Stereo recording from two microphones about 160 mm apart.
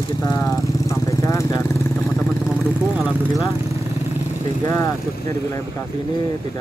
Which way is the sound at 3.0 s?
5° right (ahead or behind).